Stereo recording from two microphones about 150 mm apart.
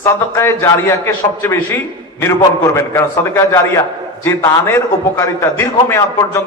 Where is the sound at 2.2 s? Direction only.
20° left (ahead or behind).